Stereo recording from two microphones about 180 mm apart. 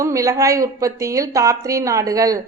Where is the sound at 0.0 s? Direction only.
15° right (ahead or behind).